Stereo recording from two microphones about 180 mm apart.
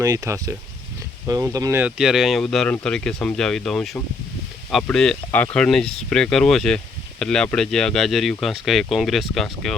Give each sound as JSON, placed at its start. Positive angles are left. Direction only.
{"t": 0.0, "sound": "speech", "side_deg": -20}
{"t": 1.8, "sound": "speech", "side_deg": -5}